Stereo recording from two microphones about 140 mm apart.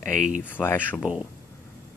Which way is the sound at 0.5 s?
15° left (ahead or behind).